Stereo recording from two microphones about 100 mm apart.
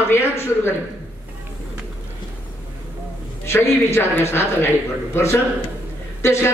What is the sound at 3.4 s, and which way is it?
A woman's voice, 25° left (ahead or behind).